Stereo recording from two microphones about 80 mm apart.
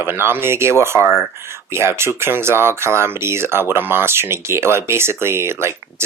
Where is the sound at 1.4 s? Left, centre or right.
Right.